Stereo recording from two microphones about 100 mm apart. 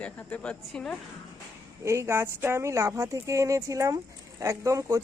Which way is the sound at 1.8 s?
30° right (ahead or behind).